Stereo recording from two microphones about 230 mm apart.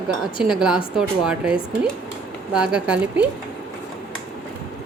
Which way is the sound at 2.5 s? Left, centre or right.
Centre.